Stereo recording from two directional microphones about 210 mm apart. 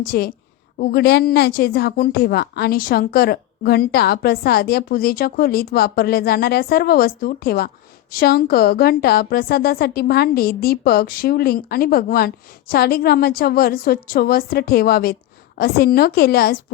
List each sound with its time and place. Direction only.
0.0 s a woman's voice: 45° left (ahead or behind)